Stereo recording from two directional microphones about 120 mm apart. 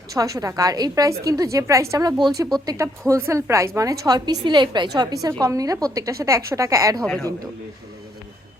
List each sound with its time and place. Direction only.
0.1 s a woman's voice: 30° right (ahead or behind)
7.0 s a man's voice: 5° left (ahead or behind)